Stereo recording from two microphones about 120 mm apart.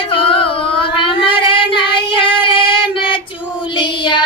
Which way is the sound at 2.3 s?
45° left (ahead or behind).